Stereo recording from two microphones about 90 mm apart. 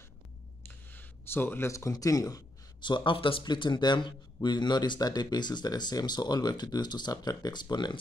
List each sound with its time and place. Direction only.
0.8 s a sound: 25° left (ahead or behind)
1.7 s speech: 35° left (ahead or behind)
2.8 s a man's voice: 60° left (ahead or behind)